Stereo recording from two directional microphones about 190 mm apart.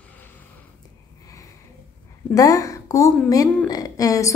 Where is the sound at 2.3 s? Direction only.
20° left (ahead or behind).